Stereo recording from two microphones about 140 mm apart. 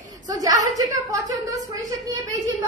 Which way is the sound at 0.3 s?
25° right (ahead or behind).